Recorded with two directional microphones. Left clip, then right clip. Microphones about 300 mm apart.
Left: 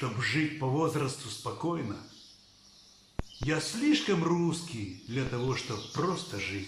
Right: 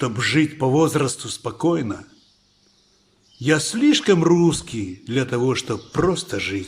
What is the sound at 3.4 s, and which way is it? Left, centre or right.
Speech, right.